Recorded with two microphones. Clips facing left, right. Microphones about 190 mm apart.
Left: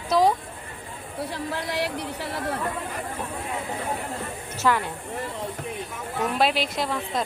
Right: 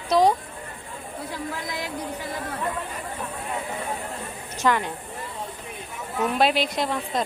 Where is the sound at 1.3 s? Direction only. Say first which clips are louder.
Left 1 dB; 70° left (ahead or behind).